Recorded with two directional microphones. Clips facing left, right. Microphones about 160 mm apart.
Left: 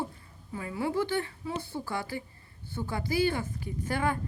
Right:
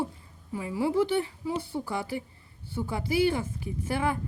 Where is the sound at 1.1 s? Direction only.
5° right (ahead or behind).